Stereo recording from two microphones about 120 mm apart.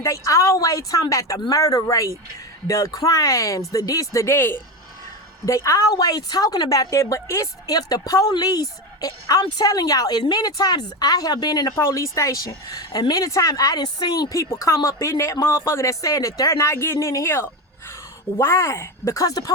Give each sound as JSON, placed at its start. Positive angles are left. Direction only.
{"t": 0.0, "sound": "a woman's voice", "side_deg": 25}